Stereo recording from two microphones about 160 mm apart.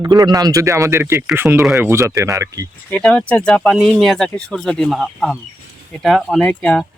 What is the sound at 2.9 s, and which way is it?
Speech, 5° left (ahead or behind).